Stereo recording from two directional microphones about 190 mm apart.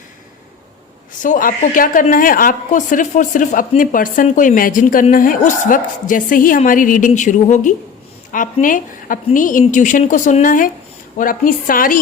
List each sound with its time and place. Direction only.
1.2 s a woman's voice: 45° left (ahead or behind)